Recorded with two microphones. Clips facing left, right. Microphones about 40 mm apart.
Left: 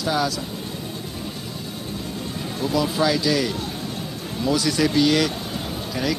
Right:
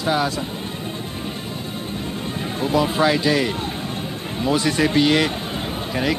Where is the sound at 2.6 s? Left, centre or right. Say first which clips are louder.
Right 3 dB; right.